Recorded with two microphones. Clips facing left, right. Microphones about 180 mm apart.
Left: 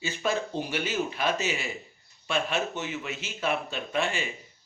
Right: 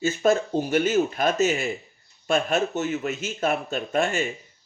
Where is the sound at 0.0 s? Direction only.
45° right (ahead or behind).